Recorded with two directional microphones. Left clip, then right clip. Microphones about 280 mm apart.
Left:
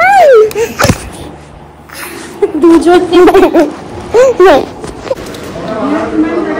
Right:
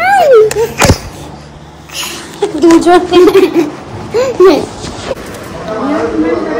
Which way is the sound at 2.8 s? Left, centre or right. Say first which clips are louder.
Even; centre.